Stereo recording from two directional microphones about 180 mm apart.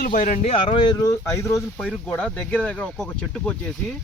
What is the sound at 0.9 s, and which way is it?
Speech, 15° left (ahead or behind).